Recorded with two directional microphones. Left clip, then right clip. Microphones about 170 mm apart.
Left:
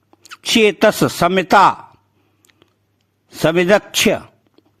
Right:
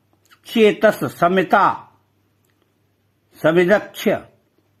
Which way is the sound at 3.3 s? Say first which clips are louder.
Left 1 dB; 40° left (ahead or behind).